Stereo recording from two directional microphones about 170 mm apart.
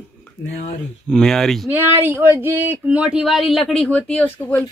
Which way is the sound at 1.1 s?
Centre (ahead or behind).